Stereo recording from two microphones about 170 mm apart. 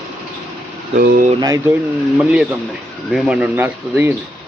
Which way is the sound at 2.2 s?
5° right (ahead or behind).